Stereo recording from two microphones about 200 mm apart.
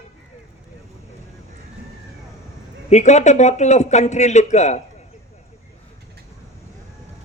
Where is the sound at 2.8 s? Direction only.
35° left (ahead or behind).